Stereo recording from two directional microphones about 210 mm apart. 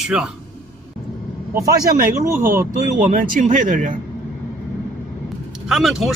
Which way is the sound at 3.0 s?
40° right (ahead or behind).